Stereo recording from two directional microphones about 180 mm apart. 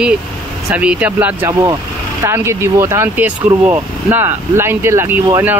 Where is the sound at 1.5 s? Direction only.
20° right (ahead or behind).